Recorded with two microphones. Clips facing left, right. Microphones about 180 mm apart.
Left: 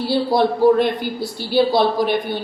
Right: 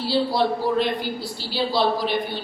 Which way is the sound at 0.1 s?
50° left (ahead or behind).